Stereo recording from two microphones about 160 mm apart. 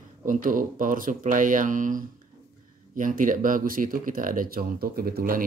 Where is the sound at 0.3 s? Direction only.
55° right (ahead or behind).